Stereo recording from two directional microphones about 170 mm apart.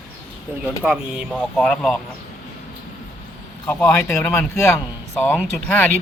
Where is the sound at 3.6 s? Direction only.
5° left (ahead or behind).